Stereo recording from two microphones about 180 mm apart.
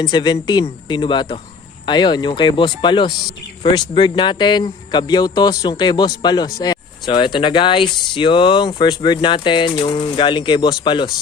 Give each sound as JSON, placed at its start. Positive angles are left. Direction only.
{"t": 0.0, "sound": "speech", "side_deg": 25}